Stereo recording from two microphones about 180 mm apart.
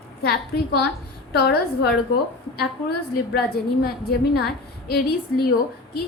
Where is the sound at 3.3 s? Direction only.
60° left (ahead or behind).